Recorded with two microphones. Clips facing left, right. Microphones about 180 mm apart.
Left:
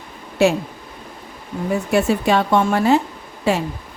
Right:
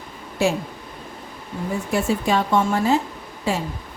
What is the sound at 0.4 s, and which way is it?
Speech, 70° left (ahead or behind).